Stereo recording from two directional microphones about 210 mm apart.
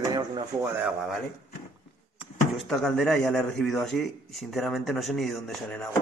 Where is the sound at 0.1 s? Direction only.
15° right (ahead or behind).